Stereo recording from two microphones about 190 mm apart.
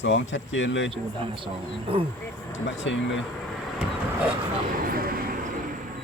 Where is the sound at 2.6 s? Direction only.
75° left (ahead or behind).